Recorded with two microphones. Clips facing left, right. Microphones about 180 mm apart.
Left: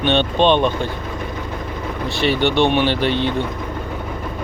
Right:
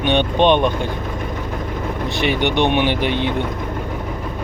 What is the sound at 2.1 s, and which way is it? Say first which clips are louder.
Speech: left 2 dB; 15° right (ahead or behind).